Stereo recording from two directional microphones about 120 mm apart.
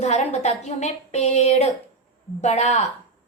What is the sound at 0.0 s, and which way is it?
A woman's voice, 70° left (ahead or behind).